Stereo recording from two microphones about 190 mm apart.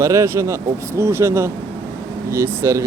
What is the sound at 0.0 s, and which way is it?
Speech, 15° right (ahead or behind).